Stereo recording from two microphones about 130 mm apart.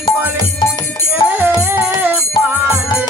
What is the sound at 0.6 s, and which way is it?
Music, 35° left (ahead or behind).